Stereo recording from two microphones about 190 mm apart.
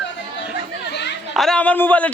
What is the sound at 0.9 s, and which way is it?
Chatter, 65° left (ahead or behind).